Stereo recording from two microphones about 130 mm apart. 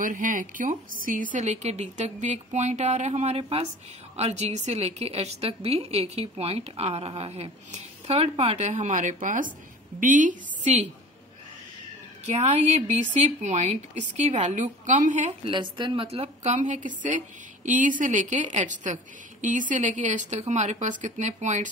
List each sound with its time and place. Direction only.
0.0 s a woman's voice: 80° right; by 10.9 s 60° right (ahead or behind)
12.4 s speech: 60° right (ahead or behind)
14.5 s a woman's voice: 80° right
15.4 s a woman's voice: 35° right (ahead or behind)
16.5 s a woman's voice: 70° right (ahead or behind)